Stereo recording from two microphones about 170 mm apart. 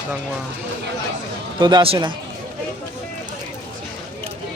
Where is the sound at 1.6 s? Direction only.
25° right (ahead or behind).